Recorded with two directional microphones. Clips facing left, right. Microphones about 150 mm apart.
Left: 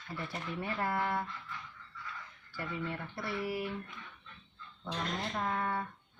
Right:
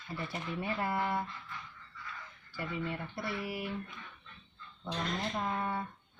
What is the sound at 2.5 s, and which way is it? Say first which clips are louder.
Speech: right 1 dB; 15° right (ahead or behind).